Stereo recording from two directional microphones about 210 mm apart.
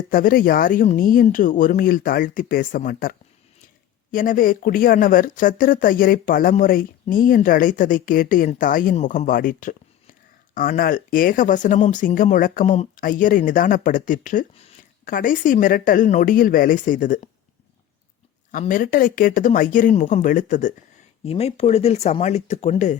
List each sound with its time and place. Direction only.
0.1 s speech: 40° left (ahead or behind)
18.6 s speech: 40° left (ahead or behind)